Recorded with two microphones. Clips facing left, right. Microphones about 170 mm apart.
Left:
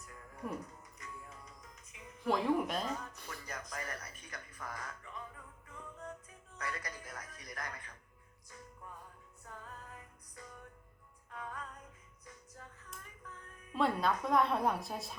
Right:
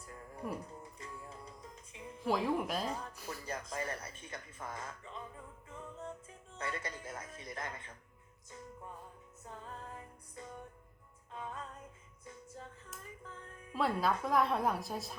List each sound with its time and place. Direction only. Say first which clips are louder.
0.0 s music: right 1 dB; 30° right (ahead or behind)
2.2 s a woman's voice: left 1 dB; centre (ahead or behind)
2.8 s speech: right 1 dB; 30° right (ahead or behind)
3.2 s a sound: right 4 dB; 30° right (ahead or behind)
6.6 s speech: right 2 dB; 25° right (ahead or behind)
9.4 s music: right 3 dB; 25° right (ahead or behind)
13.7 s a woman's voice: even; 5° right (ahead or behind)